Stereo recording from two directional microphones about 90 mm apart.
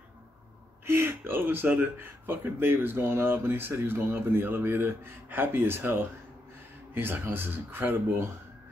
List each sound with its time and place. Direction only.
0.8 s speech: 25° right (ahead or behind)